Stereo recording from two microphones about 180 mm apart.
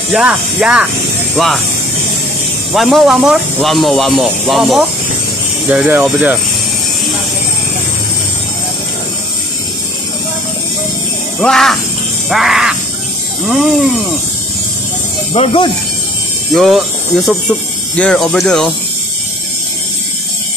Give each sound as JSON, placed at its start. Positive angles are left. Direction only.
{"t": 0.1, "sound": "speech", "side_deg": -5}
{"t": 2.7, "sound": "speech", "side_deg": 0}
{"t": 11.4, "sound": "speech", "side_deg": 0}
{"t": 15.3, "sound": "speech", "side_deg": 30}
{"t": 16.5, "sound": "speech", "side_deg": 0}